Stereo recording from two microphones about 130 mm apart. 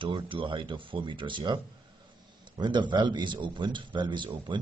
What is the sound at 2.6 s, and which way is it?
A man's voice, 35° right (ahead or behind).